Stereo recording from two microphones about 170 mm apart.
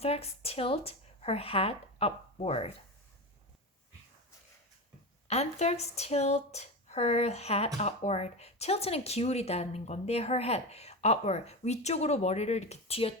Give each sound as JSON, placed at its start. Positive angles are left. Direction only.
{"t": 0.0, "sound": "speech", "side_deg": 35}
{"t": 5.3, "sound": "speech", "side_deg": 40}